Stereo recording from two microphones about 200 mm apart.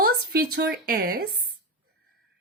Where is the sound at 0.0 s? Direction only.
50° right (ahead or behind).